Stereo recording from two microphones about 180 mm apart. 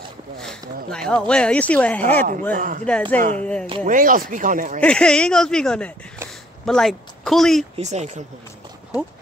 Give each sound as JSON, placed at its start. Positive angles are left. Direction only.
{"t": 0.8, "sound": "speech", "side_deg": 5}
{"t": 2.5, "sound": "speech", "side_deg": -50}
{"t": 2.8, "sound": "speech", "side_deg": 5}
{"t": 3.2, "sound": "speech", "side_deg": -45}
{"t": 4.7, "sound": "speech", "side_deg": 5}
{"t": 7.7, "sound": "speech", "side_deg": -40}